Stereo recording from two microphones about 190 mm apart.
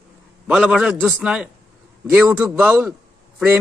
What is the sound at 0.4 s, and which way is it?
A man's voice, 5° right (ahead or behind).